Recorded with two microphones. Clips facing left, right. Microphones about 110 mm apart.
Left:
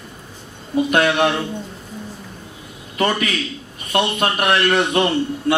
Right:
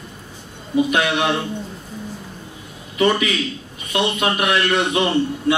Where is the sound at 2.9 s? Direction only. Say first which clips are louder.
Right 2 dB; 50° left (ahead or behind).